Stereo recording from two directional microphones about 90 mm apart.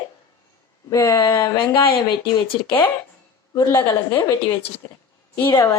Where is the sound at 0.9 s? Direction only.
35° left (ahead or behind).